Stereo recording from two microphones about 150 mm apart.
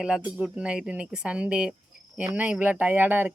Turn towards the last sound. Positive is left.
turn(degrees=-15)  # may be behind; listen again after turning